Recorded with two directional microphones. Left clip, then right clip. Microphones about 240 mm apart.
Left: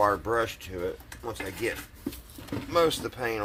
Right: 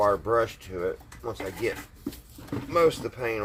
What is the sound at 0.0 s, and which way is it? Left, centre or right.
Speech, centre.